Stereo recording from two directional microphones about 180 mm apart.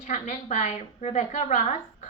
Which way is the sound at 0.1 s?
40° left (ahead or behind).